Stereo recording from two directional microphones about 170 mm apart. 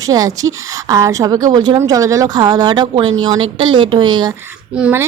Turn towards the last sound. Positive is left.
turn(degrees=-10)  # may be behind; listen again after turning